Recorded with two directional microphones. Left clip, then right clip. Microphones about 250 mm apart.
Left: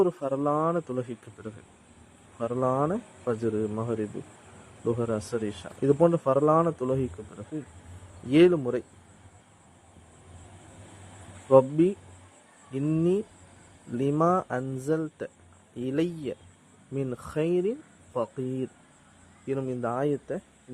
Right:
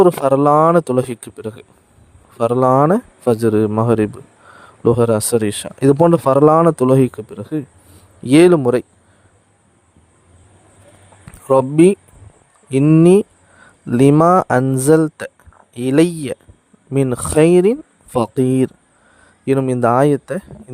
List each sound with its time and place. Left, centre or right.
0.0 s speech: right
11.4 s speech: right